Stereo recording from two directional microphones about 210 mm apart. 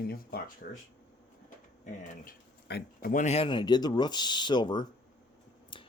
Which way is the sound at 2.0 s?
40° left (ahead or behind).